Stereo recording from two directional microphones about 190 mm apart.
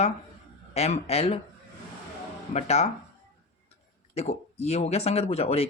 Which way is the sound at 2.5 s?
35° left (ahead or behind).